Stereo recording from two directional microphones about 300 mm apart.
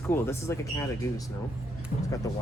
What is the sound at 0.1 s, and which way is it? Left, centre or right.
Speech, centre.